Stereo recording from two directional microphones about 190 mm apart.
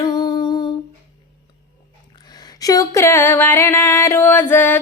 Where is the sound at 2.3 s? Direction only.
20° left (ahead or behind).